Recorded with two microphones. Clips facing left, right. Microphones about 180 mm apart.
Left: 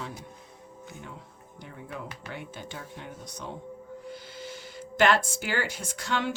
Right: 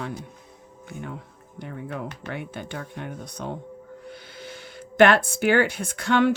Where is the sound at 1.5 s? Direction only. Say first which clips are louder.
Right 7 dB; 60° right (ahead or behind).